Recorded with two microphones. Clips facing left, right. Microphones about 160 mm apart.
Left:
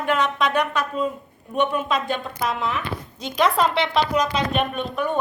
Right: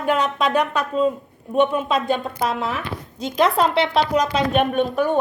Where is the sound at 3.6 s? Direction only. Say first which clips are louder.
Right 2 dB; 40° right (ahead or behind).